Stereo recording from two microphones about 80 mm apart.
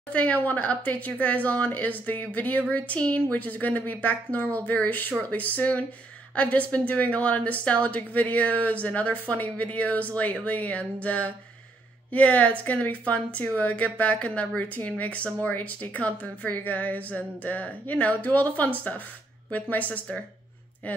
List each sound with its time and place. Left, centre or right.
0.1 s a woman's voice: centre